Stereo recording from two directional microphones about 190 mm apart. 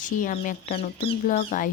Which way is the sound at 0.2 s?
45° left (ahead or behind).